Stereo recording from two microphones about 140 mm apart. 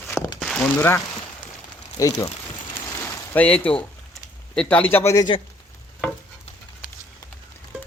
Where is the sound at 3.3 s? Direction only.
10° left (ahead or behind).